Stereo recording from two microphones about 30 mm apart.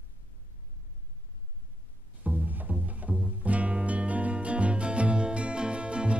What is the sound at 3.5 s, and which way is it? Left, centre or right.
Music, right.